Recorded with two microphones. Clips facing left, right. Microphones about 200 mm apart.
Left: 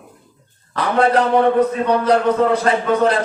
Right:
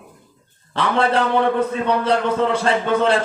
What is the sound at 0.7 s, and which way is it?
Speech, 30° right (ahead or behind).